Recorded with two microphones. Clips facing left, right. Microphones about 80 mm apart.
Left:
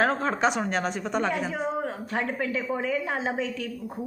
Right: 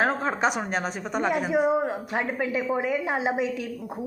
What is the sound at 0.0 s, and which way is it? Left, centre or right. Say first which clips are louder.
Speech: even; centre.